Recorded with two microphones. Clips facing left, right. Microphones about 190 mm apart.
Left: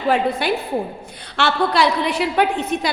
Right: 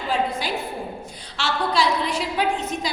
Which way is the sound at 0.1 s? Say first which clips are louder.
Left 6 dB; 65° left (ahead or behind).